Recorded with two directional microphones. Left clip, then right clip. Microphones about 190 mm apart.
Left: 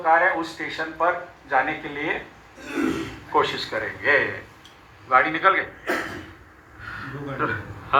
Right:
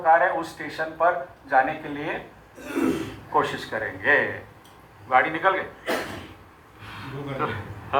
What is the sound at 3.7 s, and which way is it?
A man's voice, 15° left (ahead or behind).